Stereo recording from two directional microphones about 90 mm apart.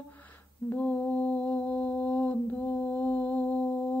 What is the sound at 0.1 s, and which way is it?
Mantra, 20° left (ahead or behind).